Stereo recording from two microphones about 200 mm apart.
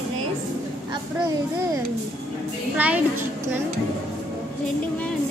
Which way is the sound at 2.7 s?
5° right (ahead or behind).